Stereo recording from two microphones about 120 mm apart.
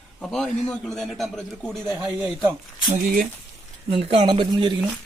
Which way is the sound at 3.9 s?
55° right (ahead or behind).